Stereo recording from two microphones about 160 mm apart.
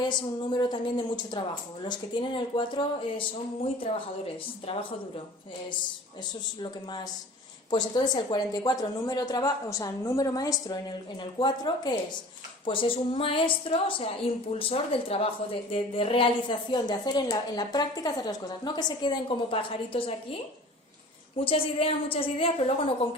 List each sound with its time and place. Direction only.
0.0 s a woman's voice: 25° left (ahead or behind)
6.6 s a woman's voice: 25° left (ahead or behind)
21.3 s speech: 35° left (ahead or behind)